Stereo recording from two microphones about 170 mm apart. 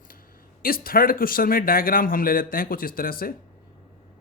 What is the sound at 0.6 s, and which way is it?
Speech, 60° left (ahead or behind).